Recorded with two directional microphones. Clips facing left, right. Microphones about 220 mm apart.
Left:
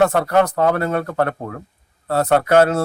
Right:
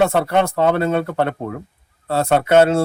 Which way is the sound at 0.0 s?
25° right (ahead or behind).